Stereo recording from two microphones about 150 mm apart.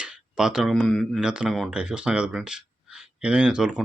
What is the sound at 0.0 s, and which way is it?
Speech, 5° right (ahead or behind).